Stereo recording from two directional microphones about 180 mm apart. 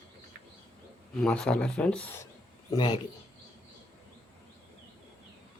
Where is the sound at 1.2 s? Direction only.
5° left (ahead or behind).